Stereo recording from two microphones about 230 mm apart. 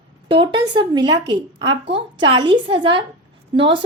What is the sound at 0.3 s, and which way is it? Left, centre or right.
A woman's voice, right.